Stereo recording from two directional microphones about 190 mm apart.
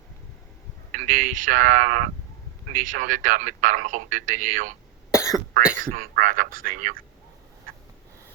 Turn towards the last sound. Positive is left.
turn(degrees=-45)  # may be behind; listen again after turning